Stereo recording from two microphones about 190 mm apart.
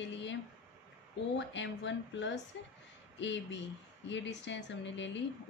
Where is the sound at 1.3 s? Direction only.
70° left (ahead or behind).